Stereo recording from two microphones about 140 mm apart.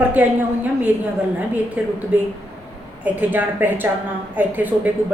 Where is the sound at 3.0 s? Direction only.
10° right (ahead or behind).